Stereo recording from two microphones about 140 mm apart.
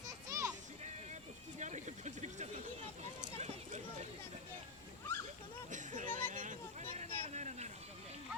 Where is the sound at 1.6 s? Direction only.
55° right (ahead or behind).